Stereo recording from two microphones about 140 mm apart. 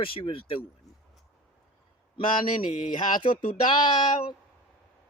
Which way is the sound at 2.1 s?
40° left (ahead or behind).